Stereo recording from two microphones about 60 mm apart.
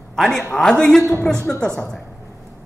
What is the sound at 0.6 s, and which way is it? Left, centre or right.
Speech, centre.